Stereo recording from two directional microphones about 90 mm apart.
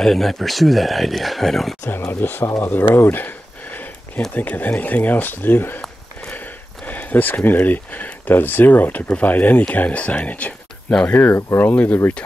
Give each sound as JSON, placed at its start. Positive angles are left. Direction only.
{"t": 0.0, "sound": "speech", "side_deg": 5}
{"t": 1.9, "sound": "speech", "side_deg": 25}
{"t": 2.9, "sound": "a sound", "side_deg": 20}
{"t": 4.3, "sound": "speech", "side_deg": 20}
{"t": 6.8, "sound": "speech", "side_deg": 15}
{"t": 11.1, "sound": "speech", "side_deg": 25}